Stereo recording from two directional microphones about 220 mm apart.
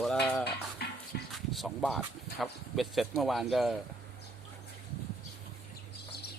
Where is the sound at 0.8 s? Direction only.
45° left (ahead or behind).